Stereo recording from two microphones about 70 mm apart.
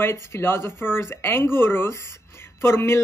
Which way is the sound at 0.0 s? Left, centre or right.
Left.